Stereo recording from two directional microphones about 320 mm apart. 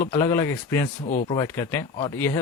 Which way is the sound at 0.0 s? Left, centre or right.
Centre.